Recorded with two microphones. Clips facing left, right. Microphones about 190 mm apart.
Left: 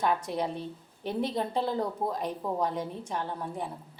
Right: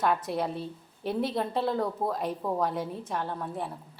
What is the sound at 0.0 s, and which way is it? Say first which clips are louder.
A woman's voice: right 1 dB; centre (ahead or behind).